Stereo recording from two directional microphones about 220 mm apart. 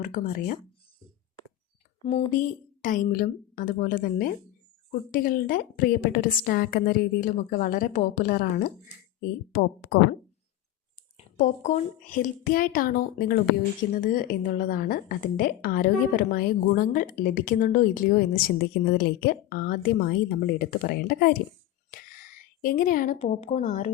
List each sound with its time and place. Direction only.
0.0 s a woman's voice: 35° left (ahead or behind)
2.0 s a woman's voice: 25° left (ahead or behind); by 10.0 s 45° left (ahead or behind)
11.3 s a woman's voice: 35° left (ahead or behind)